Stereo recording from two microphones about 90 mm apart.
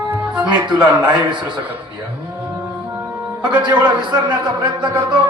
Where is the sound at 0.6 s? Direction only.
55° right (ahead or behind).